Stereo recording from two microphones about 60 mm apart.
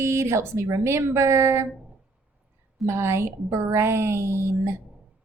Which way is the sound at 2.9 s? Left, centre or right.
Right.